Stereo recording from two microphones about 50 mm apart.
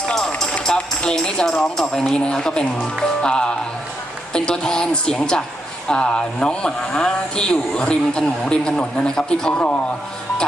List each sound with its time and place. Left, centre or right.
0.1 s run: centre
1.1 s a man's voice: centre